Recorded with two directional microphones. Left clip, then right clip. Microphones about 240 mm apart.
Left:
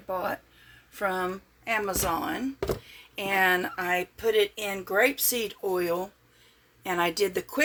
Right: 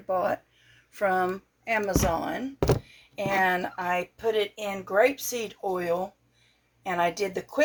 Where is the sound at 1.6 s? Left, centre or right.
Centre.